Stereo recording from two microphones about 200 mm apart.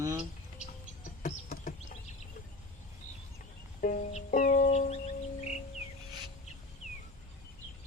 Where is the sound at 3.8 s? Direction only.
40° left (ahead or behind).